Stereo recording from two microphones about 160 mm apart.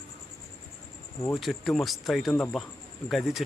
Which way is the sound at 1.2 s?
Centre (ahead or behind).